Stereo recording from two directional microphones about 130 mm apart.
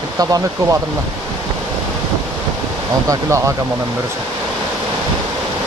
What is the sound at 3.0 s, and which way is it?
Speech, 25° right (ahead or behind).